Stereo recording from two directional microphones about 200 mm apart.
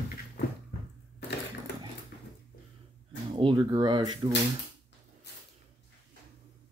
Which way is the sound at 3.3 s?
25° right (ahead or behind).